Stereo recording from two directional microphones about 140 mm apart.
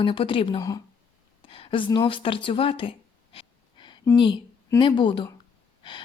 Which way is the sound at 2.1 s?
40° left (ahead or behind).